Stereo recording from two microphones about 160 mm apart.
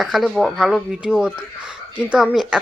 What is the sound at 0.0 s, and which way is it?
Speech, centre (ahead or behind).